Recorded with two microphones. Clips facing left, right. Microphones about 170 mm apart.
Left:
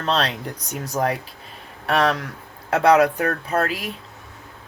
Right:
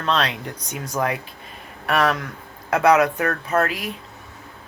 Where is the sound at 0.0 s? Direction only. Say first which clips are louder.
Even; 40° left (ahead or behind).